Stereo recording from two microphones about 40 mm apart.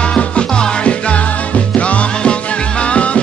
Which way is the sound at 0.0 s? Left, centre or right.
Left.